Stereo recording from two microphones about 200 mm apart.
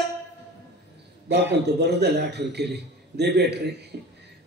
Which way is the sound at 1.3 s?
60° right (ahead or behind).